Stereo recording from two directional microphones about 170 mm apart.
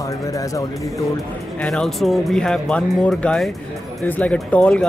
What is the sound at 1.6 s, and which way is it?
Speech, centre (ahead or behind).